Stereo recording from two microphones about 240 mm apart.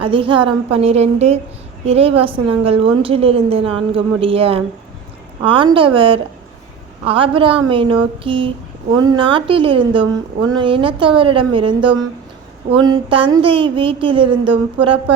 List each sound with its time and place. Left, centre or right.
0.0 s a woman's voice: right